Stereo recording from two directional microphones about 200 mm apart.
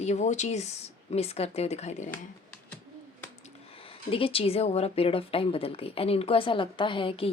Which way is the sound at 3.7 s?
25° left (ahead or behind).